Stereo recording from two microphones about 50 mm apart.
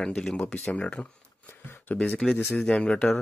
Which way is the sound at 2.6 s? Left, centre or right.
Centre.